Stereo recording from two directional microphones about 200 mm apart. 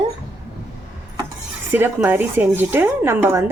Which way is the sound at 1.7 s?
10° right (ahead or behind).